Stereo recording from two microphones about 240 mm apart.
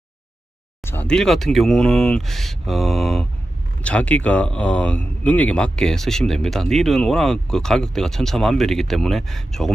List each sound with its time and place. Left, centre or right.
0.8 s speech: centre